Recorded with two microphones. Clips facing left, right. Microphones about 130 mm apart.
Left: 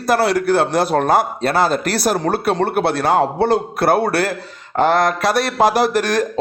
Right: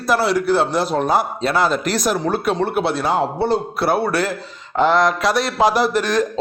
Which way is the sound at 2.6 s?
60° left (ahead or behind).